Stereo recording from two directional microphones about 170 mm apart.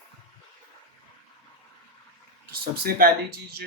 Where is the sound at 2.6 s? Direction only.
60° right (ahead or behind).